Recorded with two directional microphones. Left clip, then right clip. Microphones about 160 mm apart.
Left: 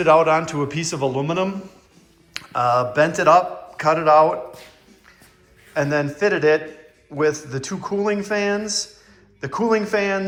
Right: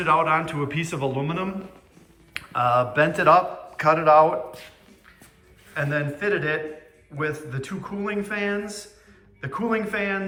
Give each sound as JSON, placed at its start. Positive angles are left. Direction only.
{"t": 0.0, "sound": "a man's voice", "side_deg": 20}
{"t": 5.7, "sound": "a man's voice", "side_deg": 20}